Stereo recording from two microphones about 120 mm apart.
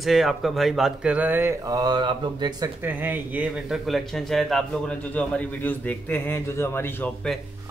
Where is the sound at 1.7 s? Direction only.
35° right (ahead or behind).